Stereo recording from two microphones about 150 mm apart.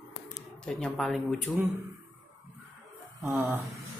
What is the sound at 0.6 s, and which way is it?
Speech, 5° left (ahead or behind).